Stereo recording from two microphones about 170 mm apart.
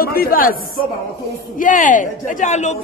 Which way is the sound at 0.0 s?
60° left (ahead or behind).